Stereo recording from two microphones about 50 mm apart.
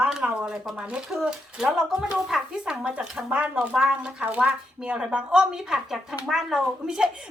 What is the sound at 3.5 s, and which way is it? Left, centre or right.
Speech, centre.